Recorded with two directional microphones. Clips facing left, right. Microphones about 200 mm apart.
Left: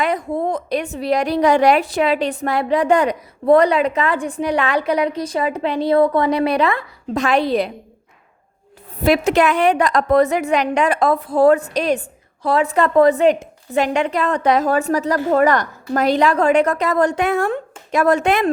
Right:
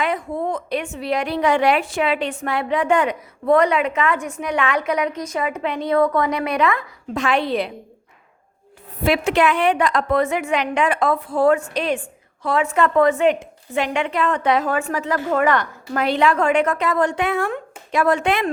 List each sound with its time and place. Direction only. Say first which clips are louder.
0.0 s a woman's voice: left 3 dB; 40° left (ahead or behind)
9.0 s a woman's voice: left 3 dB; 40° left (ahead or behind)